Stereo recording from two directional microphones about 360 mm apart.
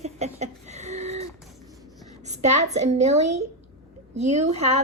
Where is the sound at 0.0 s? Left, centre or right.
Centre.